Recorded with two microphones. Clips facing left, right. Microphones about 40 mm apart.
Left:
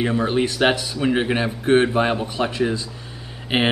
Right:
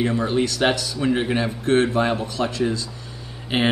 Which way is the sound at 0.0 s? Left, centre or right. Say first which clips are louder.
Left 1 dB; centre.